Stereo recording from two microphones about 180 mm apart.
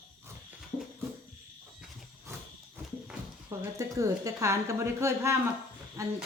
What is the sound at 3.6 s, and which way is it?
A woman's voice, 15° right (ahead or behind).